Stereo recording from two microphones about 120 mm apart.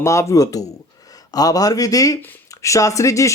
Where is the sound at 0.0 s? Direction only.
25° left (ahead or behind).